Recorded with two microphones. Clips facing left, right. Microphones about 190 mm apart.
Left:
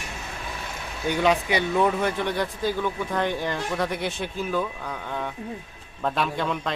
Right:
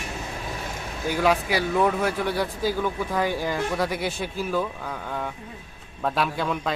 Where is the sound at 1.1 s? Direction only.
5° right (ahead or behind).